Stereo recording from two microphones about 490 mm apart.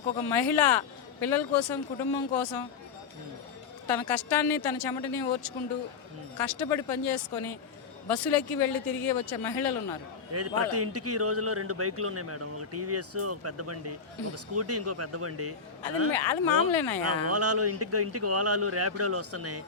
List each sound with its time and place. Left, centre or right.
0.3 s speech: left
4.1 s a woman's voice: left
10.3 s a man's voice: right
16.1 s speech: left
17.2 s a man's voice: right